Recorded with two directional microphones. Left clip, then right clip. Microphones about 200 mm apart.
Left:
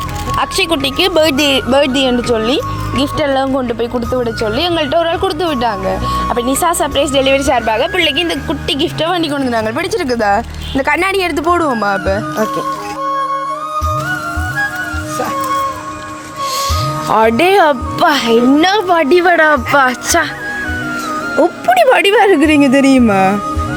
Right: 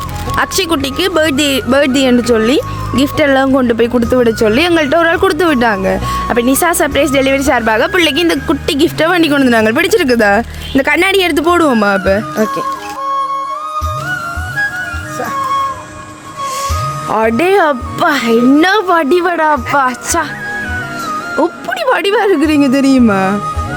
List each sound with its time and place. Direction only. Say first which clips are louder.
0.6 s speech: even; 25° right (ahead or behind)
0.9 s speech: left 1 dB; 15° right (ahead or behind); by 4.3 s 40° right (ahead or behind)
4.4 s speech: right 4 dB; 90° right
4.7 s speech: right 3 dB; 40° right (ahead or behind)
7.0 s speech: left 2 dB; 90° right
7.8 s speech: right 2 dB; 40° right (ahead or behind)
13.1 s music: right 1 dB; centre (ahead or behind)
15.2 s music: right 1 dB; centre (ahead or behind)
17.1 s speech: left 1 dB; 5° right (ahead or behind)
21.3 s speech: left 7 dB; centre (ahead or behind)